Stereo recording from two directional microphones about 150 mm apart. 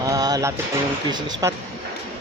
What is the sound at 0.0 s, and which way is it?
Music, 25° right (ahead or behind).